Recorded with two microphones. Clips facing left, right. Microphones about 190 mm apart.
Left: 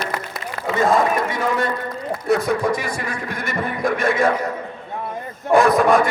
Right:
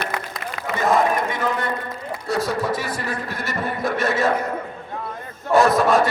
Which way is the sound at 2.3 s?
15° left (ahead or behind).